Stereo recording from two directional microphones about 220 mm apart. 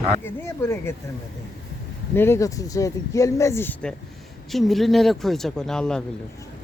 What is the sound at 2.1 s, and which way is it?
Speech, 10° left (ahead or behind).